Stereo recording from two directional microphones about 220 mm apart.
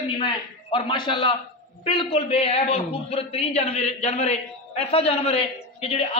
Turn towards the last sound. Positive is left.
turn(degrees=25)  # may be behind; listen again after turning